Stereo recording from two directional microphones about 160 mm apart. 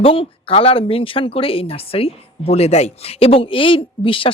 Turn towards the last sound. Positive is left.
turn(degrees=35)  # may be behind; listen again after turning